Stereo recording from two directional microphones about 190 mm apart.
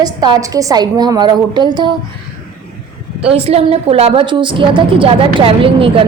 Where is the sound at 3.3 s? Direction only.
30° right (ahead or behind).